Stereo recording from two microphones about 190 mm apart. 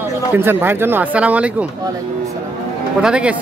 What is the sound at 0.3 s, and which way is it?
Speech, 10° right (ahead or behind).